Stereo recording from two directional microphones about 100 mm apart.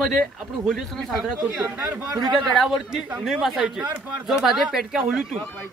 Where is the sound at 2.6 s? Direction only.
Centre (ahead or behind).